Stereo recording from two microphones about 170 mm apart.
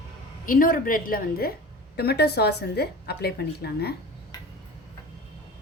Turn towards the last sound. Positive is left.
turn(degrees=70)  # may be behind; listen again after turning